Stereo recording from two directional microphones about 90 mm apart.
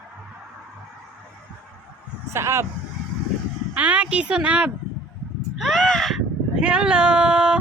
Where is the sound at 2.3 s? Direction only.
30° right (ahead or behind).